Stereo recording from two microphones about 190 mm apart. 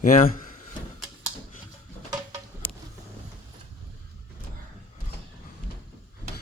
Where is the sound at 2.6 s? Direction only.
10° left (ahead or behind).